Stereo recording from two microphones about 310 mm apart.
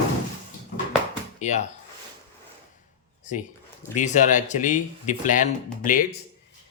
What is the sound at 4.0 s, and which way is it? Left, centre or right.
Speech, left.